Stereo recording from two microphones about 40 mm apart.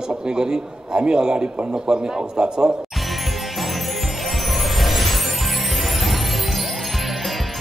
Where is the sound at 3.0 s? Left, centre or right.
Centre.